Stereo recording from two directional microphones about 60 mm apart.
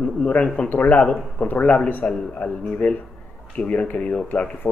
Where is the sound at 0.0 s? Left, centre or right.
Centre.